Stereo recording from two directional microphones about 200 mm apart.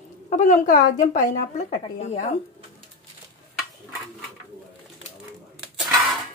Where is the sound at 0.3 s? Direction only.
40° left (ahead or behind).